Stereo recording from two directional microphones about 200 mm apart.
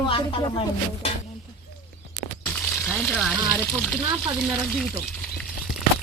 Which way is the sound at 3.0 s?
5° left (ahead or behind).